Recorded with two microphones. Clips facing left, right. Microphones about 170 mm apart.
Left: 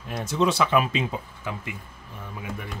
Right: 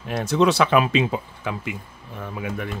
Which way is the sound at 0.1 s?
70° right (ahead or behind).